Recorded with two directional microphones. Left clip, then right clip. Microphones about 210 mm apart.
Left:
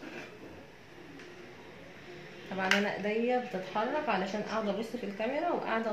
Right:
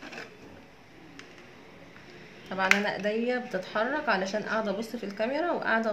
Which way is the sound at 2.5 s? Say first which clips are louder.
Right 4 dB; 35° right (ahead or behind).